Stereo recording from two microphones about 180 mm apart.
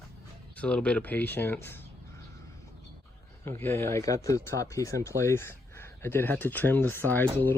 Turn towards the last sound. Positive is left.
turn(degrees=10)  # may be behind; listen again after turning